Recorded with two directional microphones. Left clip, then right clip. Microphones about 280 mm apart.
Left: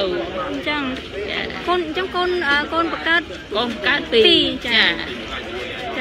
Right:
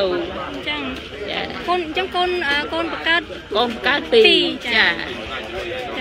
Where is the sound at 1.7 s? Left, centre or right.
Centre.